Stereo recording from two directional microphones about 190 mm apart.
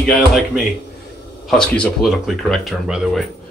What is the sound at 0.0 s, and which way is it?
Speech, 5° left (ahead or behind).